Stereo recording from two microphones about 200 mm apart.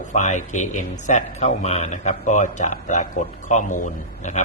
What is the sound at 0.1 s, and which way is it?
Speech, 35° left (ahead or behind).